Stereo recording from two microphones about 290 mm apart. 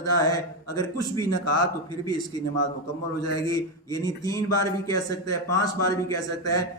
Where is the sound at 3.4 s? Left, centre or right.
Centre.